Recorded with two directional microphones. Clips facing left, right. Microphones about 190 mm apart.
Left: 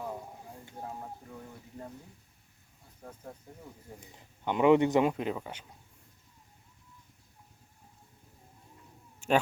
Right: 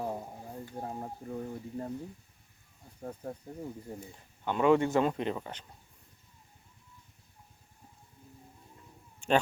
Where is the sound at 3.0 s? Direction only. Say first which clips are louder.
Right 7 dB; 35° right (ahead or behind).